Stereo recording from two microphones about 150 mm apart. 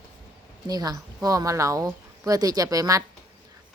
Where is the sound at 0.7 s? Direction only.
25° right (ahead or behind).